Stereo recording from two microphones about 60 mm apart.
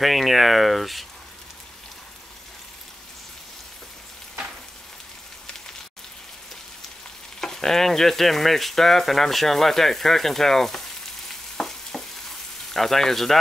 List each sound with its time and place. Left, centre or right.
0.0 s speech: centre
7.3 s speech: centre
11.5 s frying: centre
12.7 s speech: centre